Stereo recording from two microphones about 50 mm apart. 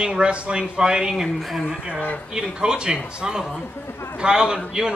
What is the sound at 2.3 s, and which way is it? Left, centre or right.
A man's voice, centre.